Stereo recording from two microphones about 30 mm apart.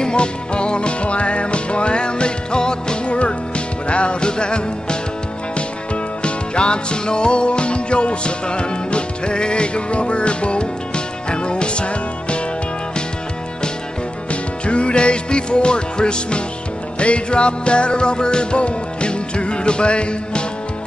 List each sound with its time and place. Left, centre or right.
0.0 s music: left
3.2 s music: left
6.2 s music: left
14.3 s music: left